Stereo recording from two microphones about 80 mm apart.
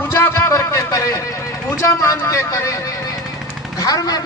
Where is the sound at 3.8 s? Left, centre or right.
Left.